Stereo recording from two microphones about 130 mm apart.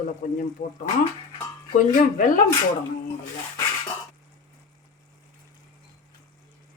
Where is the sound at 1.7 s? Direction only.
90° left.